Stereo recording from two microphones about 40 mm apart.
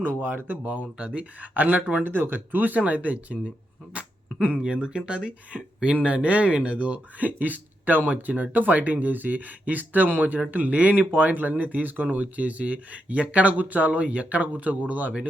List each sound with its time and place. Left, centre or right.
0.2 s speech: right
0.6 s speech: right
0.9 s speech: right
2.0 s speech: right
3.9 s a sound: right
4.6 s speech: right
7.3 s speech: right